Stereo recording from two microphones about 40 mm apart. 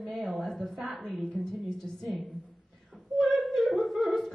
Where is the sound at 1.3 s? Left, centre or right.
Centre.